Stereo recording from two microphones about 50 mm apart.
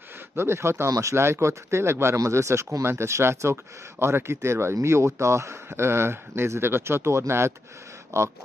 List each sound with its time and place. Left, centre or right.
0.4 s speech: right
5.7 s speech: right
8.1 s speech: right